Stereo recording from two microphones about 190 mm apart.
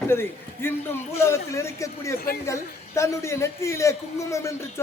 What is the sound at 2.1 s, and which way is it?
Speech, 55° left (ahead or behind).